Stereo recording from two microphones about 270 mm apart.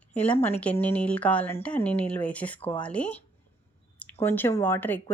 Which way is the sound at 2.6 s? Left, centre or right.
Centre.